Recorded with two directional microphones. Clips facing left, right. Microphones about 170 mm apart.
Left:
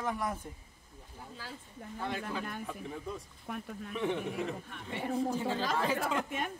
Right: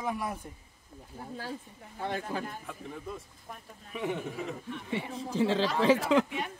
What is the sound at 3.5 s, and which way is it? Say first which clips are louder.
Speech: left 7 dB; 75° left (ahead or behind).